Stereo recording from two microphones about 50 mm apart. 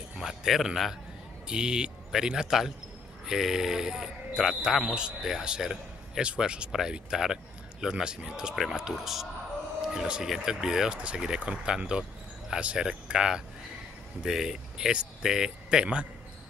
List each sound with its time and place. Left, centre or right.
0.2 s speech: centre
1.5 s speech: centre
4.8 s speech: centre